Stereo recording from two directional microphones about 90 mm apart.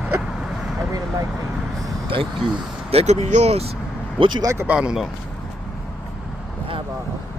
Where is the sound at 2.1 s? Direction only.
75° right (ahead or behind).